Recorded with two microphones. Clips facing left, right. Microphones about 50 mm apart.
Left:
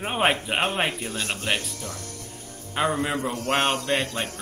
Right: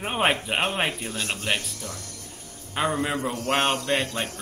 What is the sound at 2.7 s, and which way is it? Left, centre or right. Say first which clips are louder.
Speech: left 1 dB; centre.